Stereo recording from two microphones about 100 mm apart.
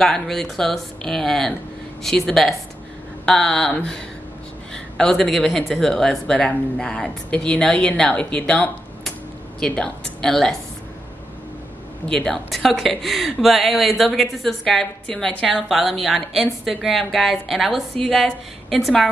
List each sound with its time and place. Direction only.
0.0 s speech: 5° left (ahead or behind)
12.1 s speech: 5° left (ahead or behind)